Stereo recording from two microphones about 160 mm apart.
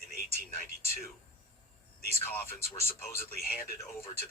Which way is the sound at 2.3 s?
15° left (ahead or behind).